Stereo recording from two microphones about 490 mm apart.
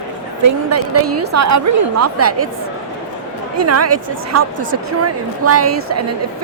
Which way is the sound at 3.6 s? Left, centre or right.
Right.